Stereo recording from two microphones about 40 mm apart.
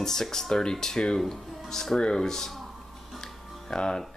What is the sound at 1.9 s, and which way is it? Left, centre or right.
Speech, left.